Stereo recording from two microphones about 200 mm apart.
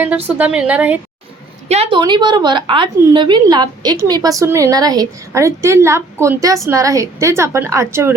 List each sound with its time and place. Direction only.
0.3 s a woman's voice: 5° right (ahead or behind)
1.6 s a woman's voice: 30° right (ahead or behind); by 8.1 s 15° right (ahead or behind)